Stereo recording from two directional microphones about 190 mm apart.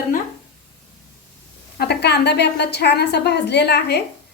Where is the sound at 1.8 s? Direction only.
60° left (ahead or behind).